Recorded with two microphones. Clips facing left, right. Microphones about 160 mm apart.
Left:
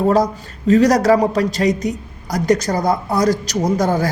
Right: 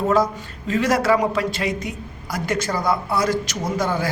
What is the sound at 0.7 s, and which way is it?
A man's voice, 40° left (ahead or behind).